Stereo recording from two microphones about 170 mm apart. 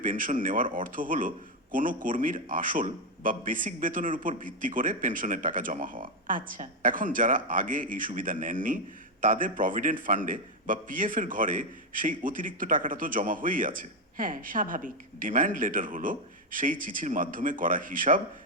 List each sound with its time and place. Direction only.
0.0 s a man's voice: 50° right (ahead or behind)